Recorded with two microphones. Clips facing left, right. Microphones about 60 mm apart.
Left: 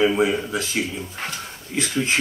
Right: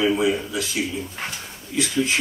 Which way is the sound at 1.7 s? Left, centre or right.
Left.